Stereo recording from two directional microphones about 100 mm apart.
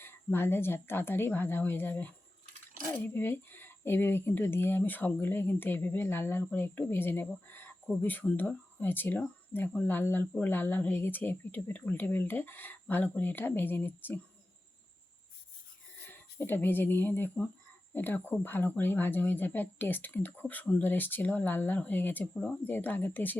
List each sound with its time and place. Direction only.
0.0 s speech: 20° left (ahead or behind)
16.0 s speech: 20° left (ahead or behind)